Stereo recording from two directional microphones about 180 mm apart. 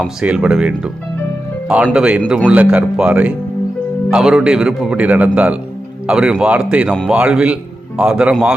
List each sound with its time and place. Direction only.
0.0 s speech: 5° right (ahead or behind)